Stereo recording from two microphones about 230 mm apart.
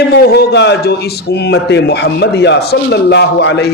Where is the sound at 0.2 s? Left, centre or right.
Left.